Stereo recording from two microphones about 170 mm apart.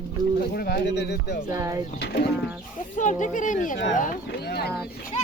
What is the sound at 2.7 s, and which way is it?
Speech, 45° left (ahead or behind).